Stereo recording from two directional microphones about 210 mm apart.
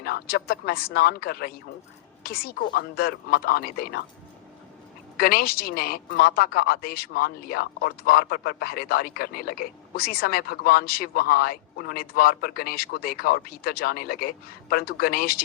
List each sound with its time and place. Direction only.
0.0 s a woman's voice: 50° left (ahead or behind)
5.1 s a woman's voice: 45° left (ahead or behind)